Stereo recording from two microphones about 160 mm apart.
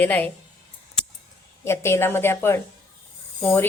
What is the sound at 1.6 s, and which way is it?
A woman's voice, 15° left (ahead or behind).